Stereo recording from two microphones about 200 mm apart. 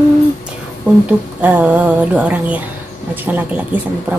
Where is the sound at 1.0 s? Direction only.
5° right (ahead or behind).